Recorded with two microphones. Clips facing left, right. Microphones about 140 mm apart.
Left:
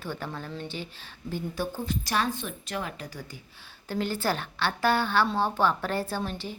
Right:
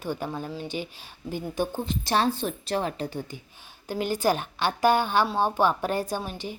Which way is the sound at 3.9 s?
15° right (ahead or behind).